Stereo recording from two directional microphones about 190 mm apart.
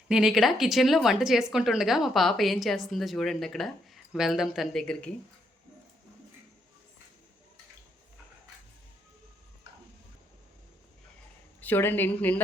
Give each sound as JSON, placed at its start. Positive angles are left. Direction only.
{"t": 0.1, "sound": "speech", "side_deg": -5}
{"t": 11.6, "sound": "a woman's voice", "side_deg": 10}